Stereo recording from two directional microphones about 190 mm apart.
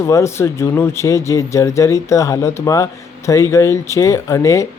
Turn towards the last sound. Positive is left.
turn(degrees=15)  # may be behind; listen again after turning